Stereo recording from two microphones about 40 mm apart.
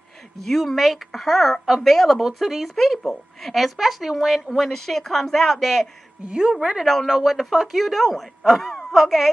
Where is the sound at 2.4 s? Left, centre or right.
Centre.